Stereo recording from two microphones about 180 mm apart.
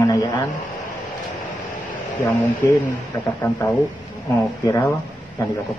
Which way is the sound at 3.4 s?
10° left (ahead or behind).